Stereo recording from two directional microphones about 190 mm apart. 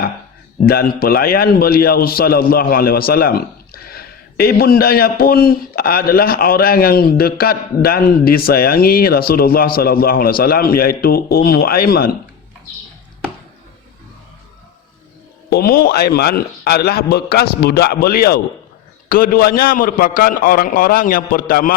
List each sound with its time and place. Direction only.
0.6 s a man's voice: 50° left (ahead or behind)
15.4 s a man's voice: 55° left (ahead or behind)